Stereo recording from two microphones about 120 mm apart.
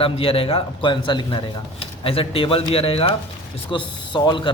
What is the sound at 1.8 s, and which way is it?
A man's voice, 50° left (ahead or behind).